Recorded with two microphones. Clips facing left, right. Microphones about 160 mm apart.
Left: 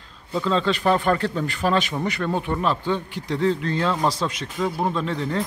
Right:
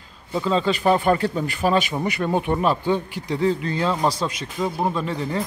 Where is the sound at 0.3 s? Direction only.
10° right (ahead or behind).